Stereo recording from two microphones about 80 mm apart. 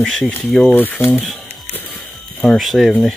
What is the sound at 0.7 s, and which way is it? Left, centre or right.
Speech, left.